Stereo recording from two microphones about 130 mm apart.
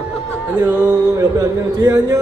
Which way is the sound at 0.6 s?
15° right (ahead or behind).